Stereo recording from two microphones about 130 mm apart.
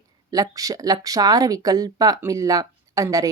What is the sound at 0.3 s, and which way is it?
Speech, 25° right (ahead or behind).